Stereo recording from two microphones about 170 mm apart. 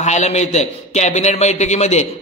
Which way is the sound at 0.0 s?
40° left (ahead or behind).